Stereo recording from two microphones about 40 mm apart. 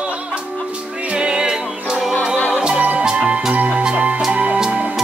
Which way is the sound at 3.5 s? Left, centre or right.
Right.